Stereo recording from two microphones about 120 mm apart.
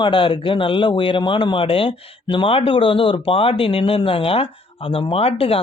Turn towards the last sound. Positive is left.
turn(degrees=55)  # may be behind; listen again after turning